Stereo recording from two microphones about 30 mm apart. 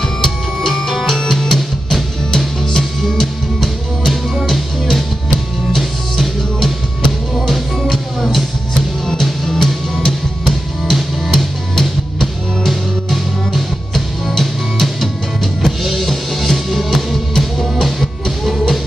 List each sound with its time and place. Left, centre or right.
0.0 s music: centre